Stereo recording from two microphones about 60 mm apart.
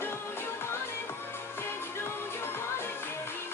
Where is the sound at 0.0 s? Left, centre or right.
Left.